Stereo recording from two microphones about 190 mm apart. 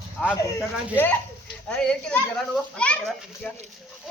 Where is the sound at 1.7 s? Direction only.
5° left (ahead or behind).